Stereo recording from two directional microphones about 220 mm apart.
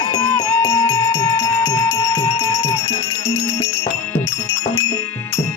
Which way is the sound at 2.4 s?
15° left (ahead or behind).